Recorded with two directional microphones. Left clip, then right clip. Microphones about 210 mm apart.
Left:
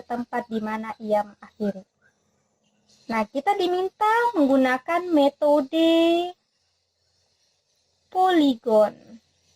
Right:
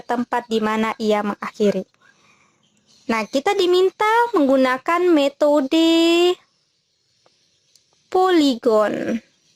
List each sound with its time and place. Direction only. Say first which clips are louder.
0.1 s speech: right 7 dB; 50° right (ahead or behind)
3.1 s speech: right 4 dB; 45° right (ahead or behind)
8.1 s speech: right 3 dB; 50° right (ahead or behind)